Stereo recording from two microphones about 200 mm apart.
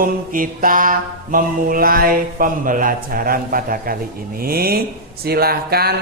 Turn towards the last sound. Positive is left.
turn(degrees=-50)  # may be behind; listen again after turning